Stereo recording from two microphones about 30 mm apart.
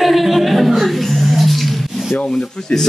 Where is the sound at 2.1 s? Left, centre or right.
Left.